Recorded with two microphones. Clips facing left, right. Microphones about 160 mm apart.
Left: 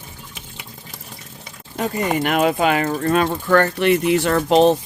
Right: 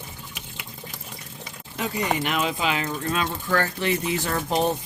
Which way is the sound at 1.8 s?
50° left (ahead or behind).